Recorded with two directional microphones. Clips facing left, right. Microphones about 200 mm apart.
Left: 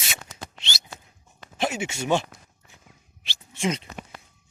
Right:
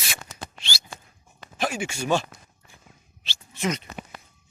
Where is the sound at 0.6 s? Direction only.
20° left (ahead or behind).